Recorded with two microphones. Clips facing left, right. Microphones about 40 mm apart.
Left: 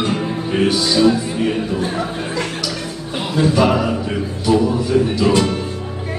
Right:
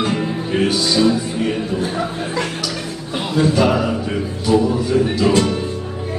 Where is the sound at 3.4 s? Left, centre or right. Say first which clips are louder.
Even; centre.